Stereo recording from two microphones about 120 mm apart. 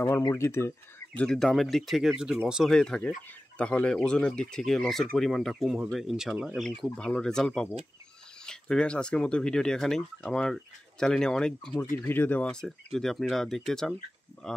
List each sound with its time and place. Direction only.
0.3 s speech: 25° left (ahead or behind)
1.2 s speech: 5° left (ahead or behind)
2.7 s speech: 5° left (ahead or behind)
12.0 s speech: 15° left (ahead or behind)